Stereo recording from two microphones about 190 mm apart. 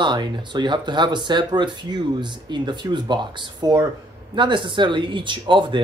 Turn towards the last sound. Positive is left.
turn(degrees=-25)  # may be behind; listen again after turning